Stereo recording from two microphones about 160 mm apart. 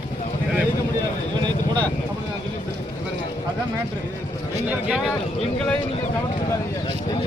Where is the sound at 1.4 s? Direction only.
25° right (ahead or behind).